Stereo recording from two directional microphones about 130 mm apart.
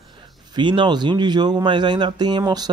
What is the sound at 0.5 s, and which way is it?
Speech, 35° right (ahead or behind).